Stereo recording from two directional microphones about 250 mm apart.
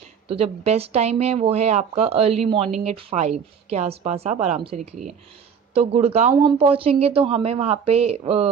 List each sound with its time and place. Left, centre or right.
0.3 s speech: right